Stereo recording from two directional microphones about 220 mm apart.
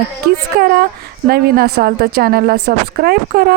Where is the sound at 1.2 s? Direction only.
45° right (ahead or behind).